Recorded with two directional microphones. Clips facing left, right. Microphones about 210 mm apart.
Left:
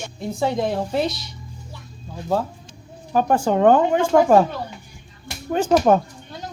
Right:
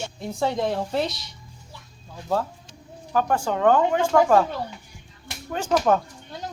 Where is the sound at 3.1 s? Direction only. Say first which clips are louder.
Left 5 dB; 20° left (ahead or behind).